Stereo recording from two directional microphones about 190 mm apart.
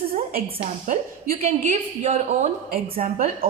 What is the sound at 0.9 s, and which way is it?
A woman's voice, 35° right (ahead or behind).